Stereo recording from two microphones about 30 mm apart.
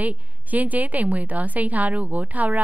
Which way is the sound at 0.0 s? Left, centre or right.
Right.